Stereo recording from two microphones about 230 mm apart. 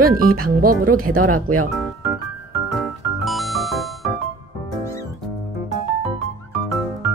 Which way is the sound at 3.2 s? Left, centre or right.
Centre.